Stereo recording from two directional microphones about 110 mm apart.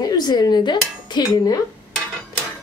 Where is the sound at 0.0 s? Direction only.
35° left (ahead or behind).